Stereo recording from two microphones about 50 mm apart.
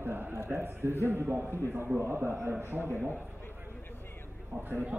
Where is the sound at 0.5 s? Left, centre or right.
Right.